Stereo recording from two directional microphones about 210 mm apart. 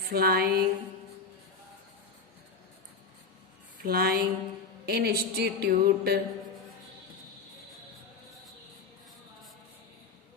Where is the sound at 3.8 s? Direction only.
45° right (ahead or behind).